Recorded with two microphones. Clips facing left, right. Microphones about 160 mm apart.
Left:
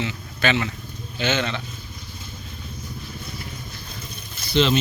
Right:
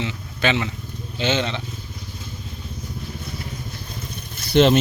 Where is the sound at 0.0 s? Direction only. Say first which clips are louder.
Right 1 dB; 25° right (ahead or behind).